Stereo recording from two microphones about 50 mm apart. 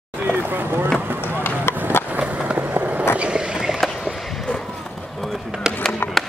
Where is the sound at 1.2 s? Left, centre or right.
Left.